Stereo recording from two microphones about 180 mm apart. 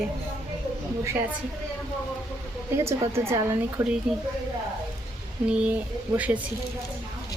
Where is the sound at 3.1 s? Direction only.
15° right (ahead or behind).